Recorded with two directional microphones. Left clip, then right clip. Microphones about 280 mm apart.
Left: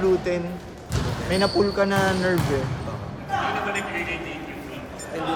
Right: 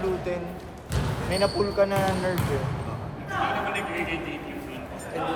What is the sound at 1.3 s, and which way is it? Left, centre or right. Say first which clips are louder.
Speech: left 3 dB; left.